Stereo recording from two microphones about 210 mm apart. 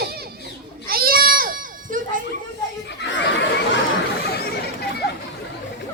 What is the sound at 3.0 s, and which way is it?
Laughter, 55° left (ahead or behind).